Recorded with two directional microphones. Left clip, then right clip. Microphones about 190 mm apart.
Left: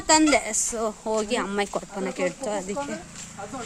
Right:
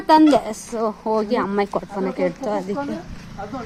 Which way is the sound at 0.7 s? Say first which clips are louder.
Right 8 dB; 20° left (ahead or behind).